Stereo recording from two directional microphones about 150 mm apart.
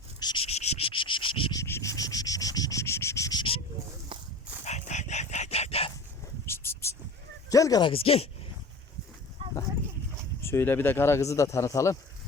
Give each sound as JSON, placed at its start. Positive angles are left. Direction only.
{"t": 0.2, "sound": "insect", "side_deg": 30}
{"t": 0.4, "sound": "insect", "side_deg": 45}
{"t": 1.5, "sound": "insect", "side_deg": 20}
{"t": 4.1, "sound": "dog", "side_deg": -30}
{"t": 4.6, "sound": "dog", "side_deg": 50}
{"t": 6.4, "sound": "a sound", "side_deg": 15}
{"t": 7.5, "sound": "speech", "side_deg": 25}
{"t": 9.4, "sound": "livestock", "side_deg": -35}
{"t": 10.4, "sound": "speech", "side_deg": 15}